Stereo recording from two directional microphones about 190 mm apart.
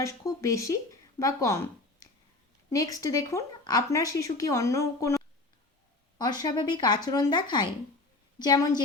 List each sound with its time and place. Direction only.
0.0 s speech: 15° left (ahead or behind)